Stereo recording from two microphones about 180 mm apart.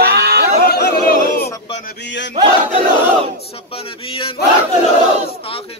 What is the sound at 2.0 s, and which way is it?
Battle cry, 85° left.